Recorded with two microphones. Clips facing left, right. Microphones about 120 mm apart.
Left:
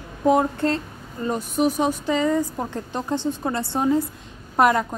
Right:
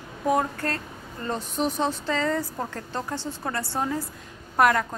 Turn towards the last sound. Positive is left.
turn(degrees=20)  # may be behind; listen again after turning